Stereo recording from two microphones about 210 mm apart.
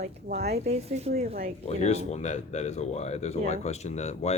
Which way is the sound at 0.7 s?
30° right (ahead or behind).